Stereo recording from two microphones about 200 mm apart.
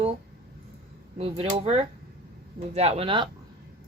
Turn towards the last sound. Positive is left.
turn(degrees=-25)  # may be behind; listen again after turning